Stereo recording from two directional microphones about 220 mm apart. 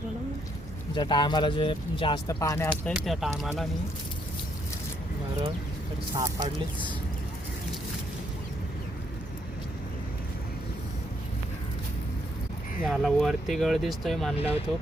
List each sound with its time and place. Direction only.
0.9 s speech: 20° left (ahead or behind)
2.9 s speech: centre (ahead or behind)
6.1 s speech: 20° right (ahead or behind)
12.8 s speech: centre (ahead or behind)